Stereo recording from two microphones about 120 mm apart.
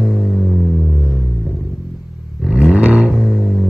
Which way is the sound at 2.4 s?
10° right (ahead or behind).